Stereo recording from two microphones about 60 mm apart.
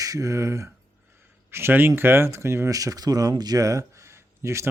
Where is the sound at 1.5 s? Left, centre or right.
Right.